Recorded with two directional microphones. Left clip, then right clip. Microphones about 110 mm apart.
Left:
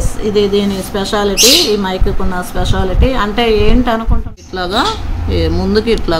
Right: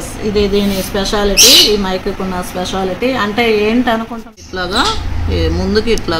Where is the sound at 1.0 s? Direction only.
5° left (ahead or behind).